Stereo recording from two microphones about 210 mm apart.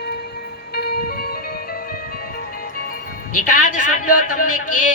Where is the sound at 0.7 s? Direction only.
50° left (ahead or behind).